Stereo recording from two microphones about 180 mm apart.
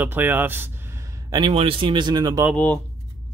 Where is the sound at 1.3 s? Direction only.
30° right (ahead or behind).